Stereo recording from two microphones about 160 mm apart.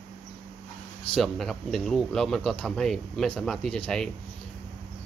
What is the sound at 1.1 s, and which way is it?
Speech, centre (ahead or behind).